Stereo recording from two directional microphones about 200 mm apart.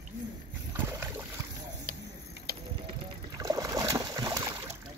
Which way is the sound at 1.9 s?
45° right (ahead or behind).